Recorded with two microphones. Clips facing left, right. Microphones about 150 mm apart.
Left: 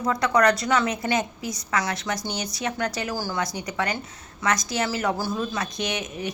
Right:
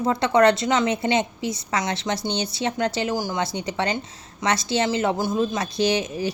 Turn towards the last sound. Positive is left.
turn(degrees=-30)  # may be behind; listen again after turning